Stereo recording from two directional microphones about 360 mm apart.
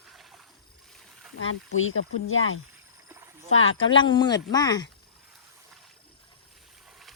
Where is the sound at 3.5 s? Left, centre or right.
Left.